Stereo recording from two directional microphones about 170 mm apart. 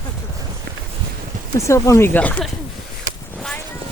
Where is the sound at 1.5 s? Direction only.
15° left (ahead or behind).